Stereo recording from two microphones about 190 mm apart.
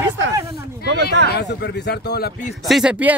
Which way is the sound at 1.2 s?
60° left (ahead or behind).